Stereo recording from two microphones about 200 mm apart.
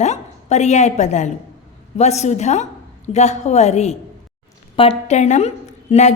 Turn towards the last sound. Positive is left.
turn(degrees=35)  # may be behind; listen again after turning